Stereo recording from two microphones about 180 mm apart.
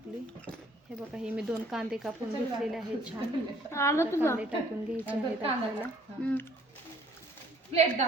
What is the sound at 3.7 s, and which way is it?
Speech, 15° left (ahead or behind).